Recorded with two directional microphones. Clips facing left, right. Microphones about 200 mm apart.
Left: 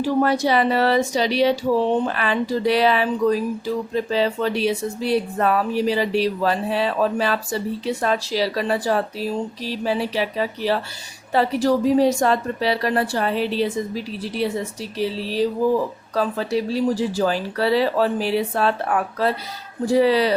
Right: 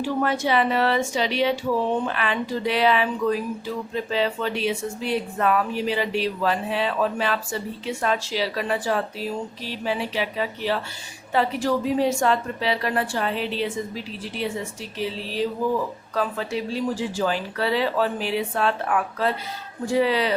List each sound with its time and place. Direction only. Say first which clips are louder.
0.0 s speech: left 5 dB; 35° left (ahead or behind)